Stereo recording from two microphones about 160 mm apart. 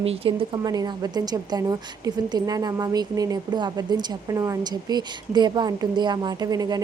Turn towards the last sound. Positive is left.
turn(degrees=-25)  # may be behind; listen again after turning